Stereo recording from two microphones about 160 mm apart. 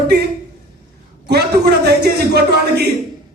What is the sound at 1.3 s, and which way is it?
A man's voice, 90° right.